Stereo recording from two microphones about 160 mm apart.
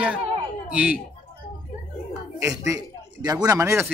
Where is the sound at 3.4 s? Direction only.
20° right (ahead or behind).